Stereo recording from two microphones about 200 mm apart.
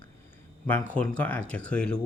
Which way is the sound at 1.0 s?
5° left (ahead or behind).